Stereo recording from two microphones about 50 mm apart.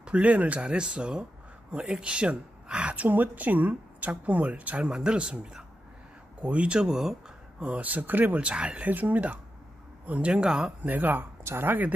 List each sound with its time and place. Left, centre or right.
0.0 s speech: right
3.1 s speech: right
4.8 s speech: centre
6.9 s speech: centre
7.6 s speech: right
8.4 s speech: right
10.8 s speech: right